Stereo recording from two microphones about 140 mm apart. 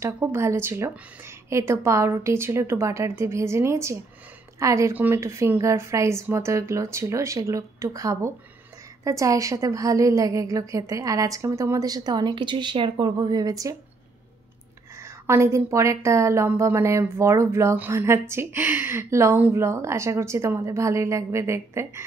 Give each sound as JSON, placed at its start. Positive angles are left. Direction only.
{"t": 0.0, "sound": "a woman's voice", "side_deg": -20}
{"t": 15.0, "sound": "a woman's voice", "side_deg": -20}